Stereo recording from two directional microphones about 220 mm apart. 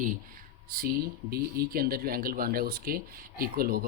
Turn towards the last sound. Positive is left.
turn(degrees=-40)  # may be behind; listen again after turning